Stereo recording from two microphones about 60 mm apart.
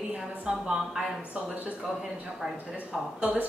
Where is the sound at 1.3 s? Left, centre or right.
Right.